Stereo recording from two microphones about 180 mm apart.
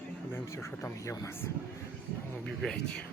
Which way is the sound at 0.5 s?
15° left (ahead or behind).